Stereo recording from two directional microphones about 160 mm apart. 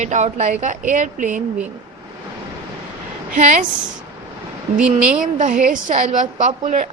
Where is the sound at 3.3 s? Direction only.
55° right (ahead or behind).